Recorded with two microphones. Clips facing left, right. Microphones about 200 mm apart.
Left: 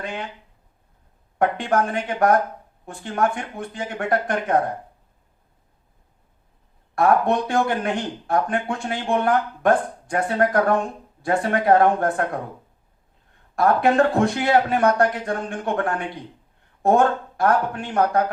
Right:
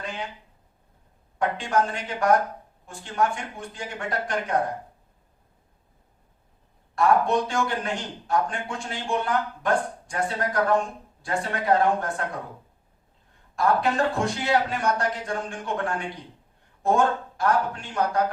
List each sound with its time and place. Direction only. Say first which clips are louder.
1.4 s speech: left 4 dB; 60° left (ahead or behind)
6.9 s speech: left 2 dB; 60° left (ahead or behind)
13.6 s speech: left 5 dB; 60° left (ahead or behind)